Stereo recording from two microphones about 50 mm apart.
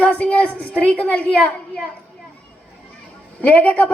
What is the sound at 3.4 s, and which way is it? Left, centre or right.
Speech, left.